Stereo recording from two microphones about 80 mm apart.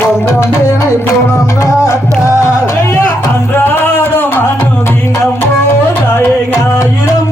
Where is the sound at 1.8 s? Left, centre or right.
Left.